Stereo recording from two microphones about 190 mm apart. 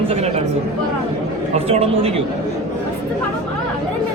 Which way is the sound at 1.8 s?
30° right (ahead or behind).